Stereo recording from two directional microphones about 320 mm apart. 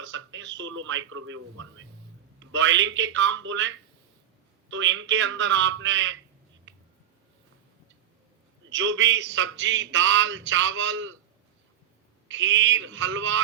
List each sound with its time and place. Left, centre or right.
0.0 s radio: right
0.8 s a man's voice: right
8.7 s a man's voice: right
12.3 s a man's voice: right